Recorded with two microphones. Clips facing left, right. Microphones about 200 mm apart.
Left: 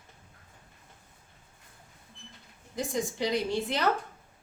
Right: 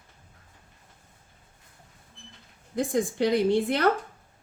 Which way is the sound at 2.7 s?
55° right (ahead or behind).